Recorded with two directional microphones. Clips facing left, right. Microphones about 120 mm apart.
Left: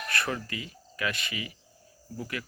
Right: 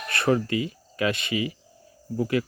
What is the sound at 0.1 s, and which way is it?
Speech, 25° right (ahead or behind).